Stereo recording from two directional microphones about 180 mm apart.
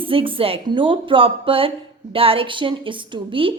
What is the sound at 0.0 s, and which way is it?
A woman's voice, 30° right (ahead or behind).